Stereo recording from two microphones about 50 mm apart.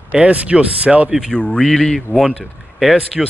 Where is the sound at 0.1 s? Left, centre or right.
Right.